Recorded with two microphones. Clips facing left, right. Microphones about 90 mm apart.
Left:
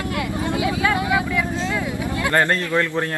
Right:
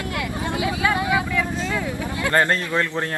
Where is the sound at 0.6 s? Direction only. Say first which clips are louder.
Even; 25° right (ahead or behind).